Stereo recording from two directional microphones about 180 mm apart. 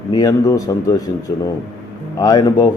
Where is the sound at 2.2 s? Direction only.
20° left (ahead or behind).